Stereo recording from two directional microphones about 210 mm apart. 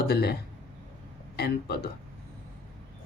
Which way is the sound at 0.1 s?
50° left (ahead or behind).